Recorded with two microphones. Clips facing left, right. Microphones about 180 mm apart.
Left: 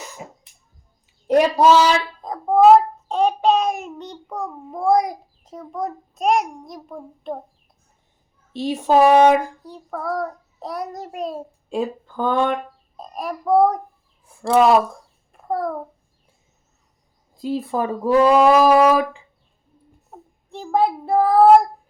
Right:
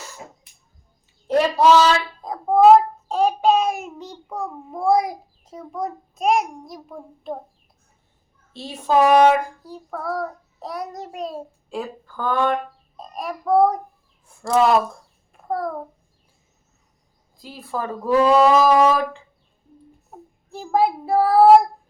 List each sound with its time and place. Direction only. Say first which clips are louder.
0.0 s a sound: left 3 dB; 15° left (ahead or behind)
1.3 s speech: left 1 dB; 15° left (ahead or behind)
2.2 s a sound: left 1 dB; 5° right (ahead or behind)
3.1 s child singing: even; 5° right (ahead or behind)
8.5 s speech: left 3 dB; 15° left (ahead or behind)
9.6 s child singing: left 1 dB; centre (ahead or behind)
11.7 s speech: left 6 dB; 20° left (ahead or behind)
13.0 s child singing: left 2 dB; centre (ahead or behind)
15.3 s a sound: left 2 dB; centre (ahead or behind)
17.3 s speech: left 7 dB; 25° left (ahead or behind)
20.1 s a child's voice: left 1 dB; 5° right (ahead or behind)